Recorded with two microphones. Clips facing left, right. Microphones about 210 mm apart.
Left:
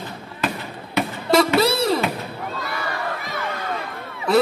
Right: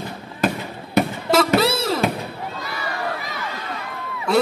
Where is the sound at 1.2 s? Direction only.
Centre (ahead or behind).